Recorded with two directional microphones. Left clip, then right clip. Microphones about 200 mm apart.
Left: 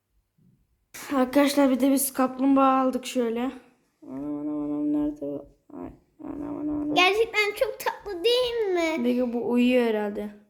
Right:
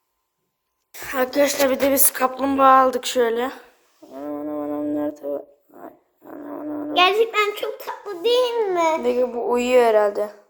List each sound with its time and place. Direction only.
1.0 s a woman's voice: centre (ahead or behind)
1.9 s a woman's voice: 15° right (ahead or behind)
4.2 s a sound: 10° right (ahead or behind)
6.5 s cat: 10° right (ahead or behind)
6.9 s a child's voice: 10° left (ahead or behind)
8.7 s a child's voice: 45° left (ahead or behind)
9.5 s a child's voice: 15° left (ahead or behind)